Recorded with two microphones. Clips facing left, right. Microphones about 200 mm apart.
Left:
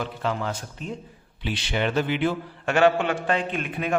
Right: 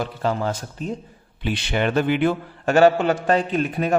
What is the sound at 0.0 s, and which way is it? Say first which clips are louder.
Speech: right 4 dB; 40° right (ahead or behind).